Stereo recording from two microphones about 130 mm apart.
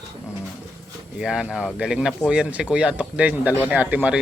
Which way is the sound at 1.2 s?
5° right (ahead or behind).